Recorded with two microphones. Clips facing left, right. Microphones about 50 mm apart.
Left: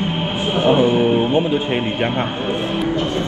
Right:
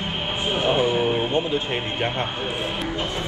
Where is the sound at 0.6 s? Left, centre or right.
Left.